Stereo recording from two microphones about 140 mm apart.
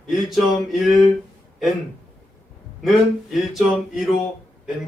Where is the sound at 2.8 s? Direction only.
Centre (ahead or behind).